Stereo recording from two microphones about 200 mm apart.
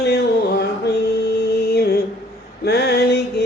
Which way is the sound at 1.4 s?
55° left (ahead or behind).